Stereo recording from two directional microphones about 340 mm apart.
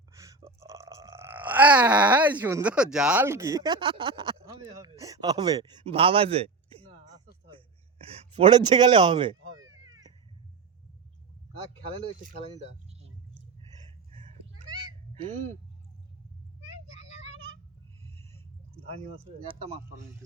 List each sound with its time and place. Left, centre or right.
0.1 s burping: centre
8.4 s speech: centre
9.6 s cat: right
11.7 s speech: right
14.1 s a sound: centre
16.6 s child singing: right
18.2 s a sound: centre